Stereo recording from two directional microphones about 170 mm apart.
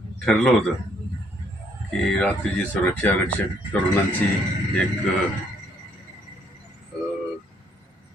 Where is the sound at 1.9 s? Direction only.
5° left (ahead or behind).